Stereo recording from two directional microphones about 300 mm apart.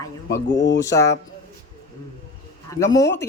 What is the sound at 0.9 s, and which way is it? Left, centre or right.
Speech, centre.